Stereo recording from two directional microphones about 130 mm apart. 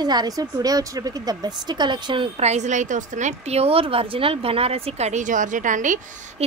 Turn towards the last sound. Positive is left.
turn(degrees=-80)